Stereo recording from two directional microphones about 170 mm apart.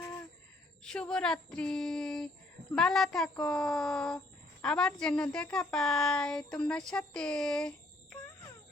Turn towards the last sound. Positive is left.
turn(degrees=5)  # may be behind; listen again after turning